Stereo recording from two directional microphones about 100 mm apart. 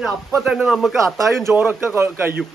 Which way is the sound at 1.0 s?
30° right (ahead or behind).